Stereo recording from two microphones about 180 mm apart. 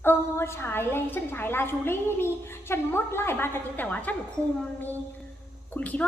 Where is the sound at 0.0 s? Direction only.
15° left (ahead or behind).